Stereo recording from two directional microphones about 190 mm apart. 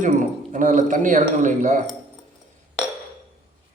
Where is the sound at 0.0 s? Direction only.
45° right (ahead or behind).